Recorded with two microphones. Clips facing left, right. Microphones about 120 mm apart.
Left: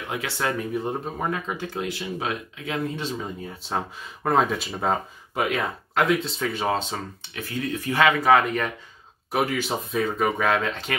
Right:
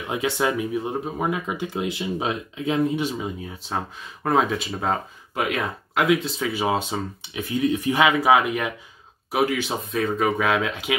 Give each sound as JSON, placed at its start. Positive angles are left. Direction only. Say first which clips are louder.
{"t": 0.1, "sound": "speech", "louder": "right 4 dB", "side_deg": -20}
{"t": 0.7, "sound": "speech", "louder": "right 2 dB", "side_deg": -5}